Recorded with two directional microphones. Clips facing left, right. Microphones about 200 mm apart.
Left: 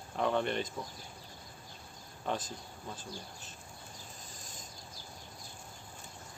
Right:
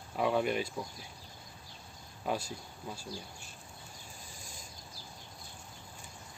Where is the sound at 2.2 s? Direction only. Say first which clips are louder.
Right 1 dB; 5° right (ahead or behind).